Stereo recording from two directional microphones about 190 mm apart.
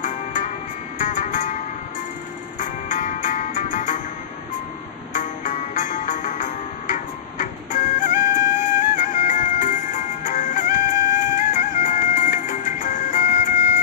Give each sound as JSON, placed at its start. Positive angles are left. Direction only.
{"t": 0.0, "sound": "music", "side_deg": 40}
{"t": 2.6, "sound": "music", "side_deg": 40}
{"t": 5.1, "sound": "music", "side_deg": 40}